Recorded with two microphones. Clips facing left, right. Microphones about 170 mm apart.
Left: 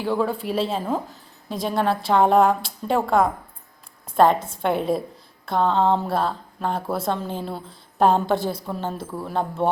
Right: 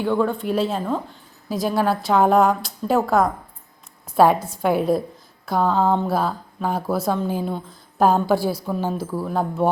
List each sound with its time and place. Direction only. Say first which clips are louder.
0.0 s speech: right 2 dB; centre (ahead or behind)
4.4 s a woman's voice: right 1 dB; 25° left (ahead or behind)
4.6 s speech: right 3 dB; 5° right (ahead or behind)